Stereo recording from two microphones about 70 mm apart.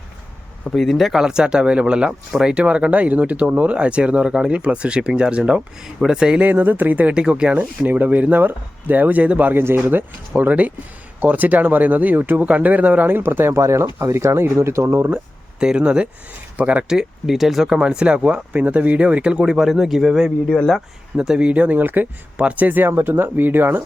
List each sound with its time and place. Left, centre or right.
0.6 s speech: centre
6.4 s speech: right
15.6 s speech: centre; by 23.8 s right